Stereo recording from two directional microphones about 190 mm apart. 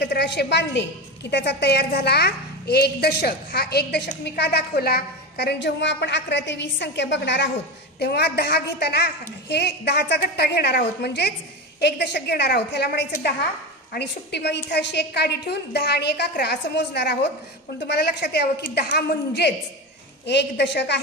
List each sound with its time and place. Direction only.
0.0 s a woman's voice: 60° left (ahead or behind)